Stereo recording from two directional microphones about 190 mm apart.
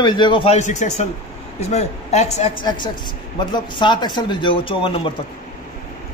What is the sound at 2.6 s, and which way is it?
A man's voice, 25° left (ahead or behind).